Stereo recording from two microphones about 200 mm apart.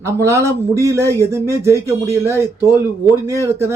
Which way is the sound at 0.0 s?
15° right (ahead or behind).